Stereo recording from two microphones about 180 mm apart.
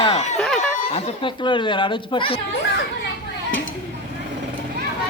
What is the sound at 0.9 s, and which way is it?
Speech, 30° left (ahead or behind).